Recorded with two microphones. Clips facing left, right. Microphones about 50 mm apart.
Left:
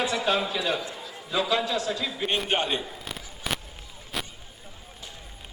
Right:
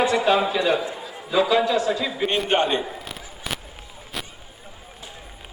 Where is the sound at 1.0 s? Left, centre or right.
Right.